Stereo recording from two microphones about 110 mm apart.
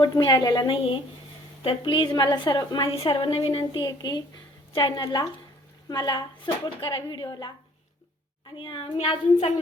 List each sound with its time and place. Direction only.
0.0 s a woman's voice: 40° left (ahead or behind)
2.9 s a woman's voice: 55° left (ahead or behind)
3.6 s a woman's voice: 35° left (ahead or behind); by 9.5 s 60° left (ahead or behind)